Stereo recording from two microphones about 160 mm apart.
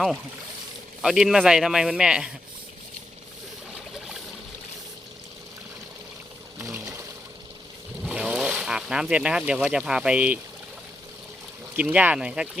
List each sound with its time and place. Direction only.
1.0 s a man's voice: 5° right (ahead or behind)
6.6 s a sound: 15° right (ahead or behind)
8.0 s speech: 5° right (ahead or behind)
11.8 s speech: 10° right (ahead or behind)